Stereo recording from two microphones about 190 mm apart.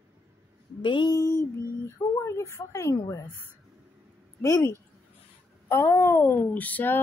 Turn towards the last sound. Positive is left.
turn(degrees=10)  # may be behind; listen again after turning